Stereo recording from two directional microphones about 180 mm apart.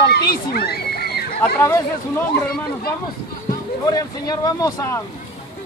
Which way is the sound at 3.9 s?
20° left (ahead or behind).